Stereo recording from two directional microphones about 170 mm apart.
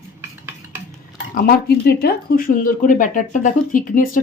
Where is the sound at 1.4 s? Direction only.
65° left (ahead or behind).